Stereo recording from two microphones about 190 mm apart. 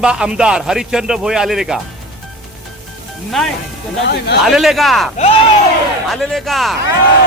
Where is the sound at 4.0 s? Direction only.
60° left (ahead or behind).